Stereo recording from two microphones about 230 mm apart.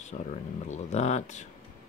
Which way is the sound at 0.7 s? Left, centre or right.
Left.